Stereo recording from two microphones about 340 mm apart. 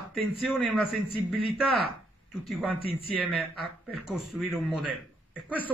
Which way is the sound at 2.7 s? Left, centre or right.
Centre.